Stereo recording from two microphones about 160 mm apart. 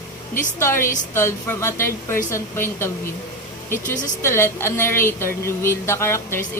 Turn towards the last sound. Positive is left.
turn(degrees=15)  # may be behind; listen again after turning